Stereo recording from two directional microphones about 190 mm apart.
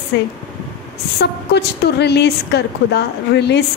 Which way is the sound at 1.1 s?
60° left (ahead or behind).